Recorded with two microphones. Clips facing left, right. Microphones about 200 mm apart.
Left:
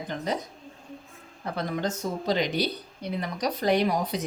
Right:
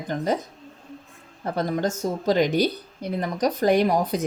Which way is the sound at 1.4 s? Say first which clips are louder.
Right 5 dB; 40° right (ahead or behind).